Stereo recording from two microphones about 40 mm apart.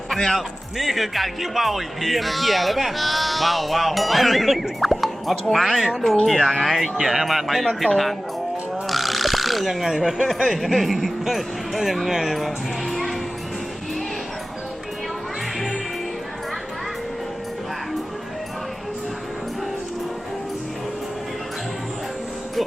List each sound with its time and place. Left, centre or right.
0.2 s speech: centre
0.8 s speech: centre
6.9 s speech: centre
8.9 s speech: centre